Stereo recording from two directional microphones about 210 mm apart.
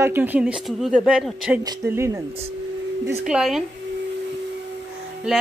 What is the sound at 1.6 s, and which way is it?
Speech, 15° right (ahead or behind).